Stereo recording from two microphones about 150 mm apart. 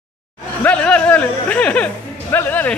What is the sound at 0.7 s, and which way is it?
Speech, 10° left (ahead or behind).